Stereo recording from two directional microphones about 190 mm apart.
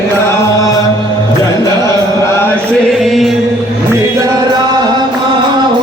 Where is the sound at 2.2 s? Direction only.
15° left (ahead or behind).